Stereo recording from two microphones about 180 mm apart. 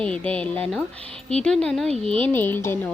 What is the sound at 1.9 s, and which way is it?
Speech, 30° right (ahead or behind).